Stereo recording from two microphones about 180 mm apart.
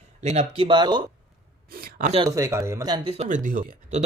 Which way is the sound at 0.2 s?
35° right (ahead or behind).